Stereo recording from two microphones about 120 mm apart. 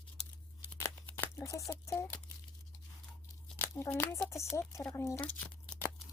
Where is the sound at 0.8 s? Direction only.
25° left (ahead or behind).